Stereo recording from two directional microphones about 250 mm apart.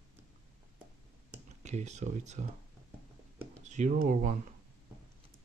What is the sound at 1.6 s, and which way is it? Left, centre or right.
Speech, right.